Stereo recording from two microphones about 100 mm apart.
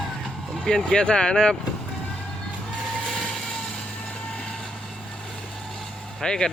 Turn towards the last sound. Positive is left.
turn(degrees=5)  # may be behind; listen again after turning